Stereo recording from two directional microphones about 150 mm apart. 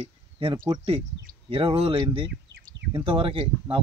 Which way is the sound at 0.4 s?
40° right (ahead or behind).